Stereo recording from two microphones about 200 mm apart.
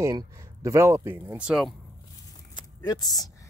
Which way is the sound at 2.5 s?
20° left (ahead or behind).